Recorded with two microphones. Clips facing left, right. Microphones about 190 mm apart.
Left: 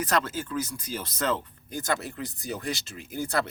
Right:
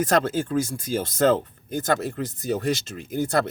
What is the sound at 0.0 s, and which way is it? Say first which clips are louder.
Speech: right 6 dB; 50° right (ahead or behind).